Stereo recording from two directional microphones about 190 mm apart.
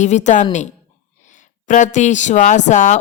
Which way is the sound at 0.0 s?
40° left (ahead or behind).